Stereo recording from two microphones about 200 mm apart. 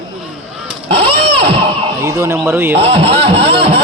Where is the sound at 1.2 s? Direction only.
30° right (ahead or behind).